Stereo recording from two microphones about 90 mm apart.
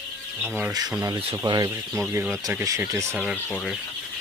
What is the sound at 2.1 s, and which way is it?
Speech, 30° right (ahead or behind).